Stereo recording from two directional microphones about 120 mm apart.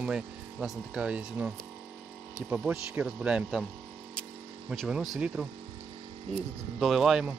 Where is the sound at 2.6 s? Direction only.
5° right (ahead or behind).